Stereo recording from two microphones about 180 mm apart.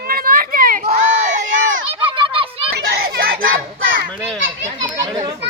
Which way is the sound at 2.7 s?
60° right (ahead or behind).